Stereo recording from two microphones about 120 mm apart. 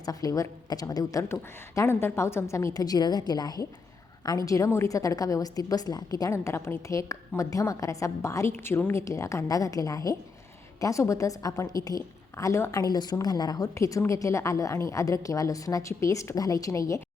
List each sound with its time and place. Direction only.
0.0 s a woman's voice: 30° left (ahead or behind)